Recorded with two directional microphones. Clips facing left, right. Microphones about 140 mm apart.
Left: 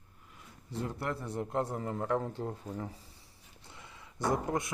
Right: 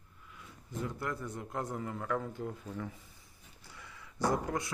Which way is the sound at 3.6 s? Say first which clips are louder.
Left 1 dB; 25° left (ahead or behind).